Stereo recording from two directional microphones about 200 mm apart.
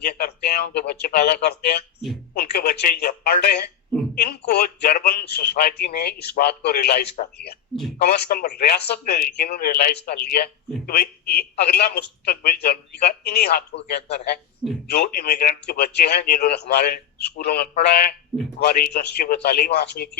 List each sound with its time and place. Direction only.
0.0 s speech: 55° left (ahead or behind)